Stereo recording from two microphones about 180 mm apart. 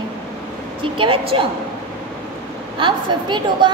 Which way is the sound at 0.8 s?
30° right (ahead or behind).